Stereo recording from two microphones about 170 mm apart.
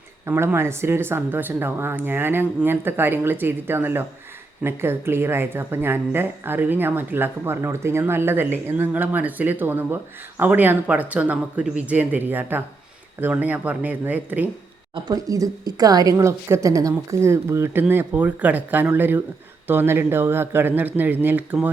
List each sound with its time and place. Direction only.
0.3 s a woman's voice: 15° right (ahead or behind)
14.9 s a woman's voice: 20° right (ahead or behind)